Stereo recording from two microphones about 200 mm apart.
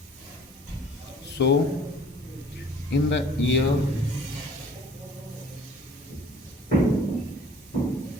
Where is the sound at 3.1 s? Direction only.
60° left (ahead or behind).